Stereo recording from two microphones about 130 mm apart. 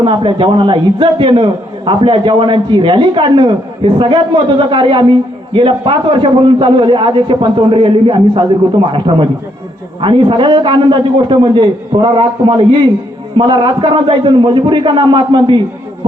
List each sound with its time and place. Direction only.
0.0 s a man's voice: 40° right (ahead or behind)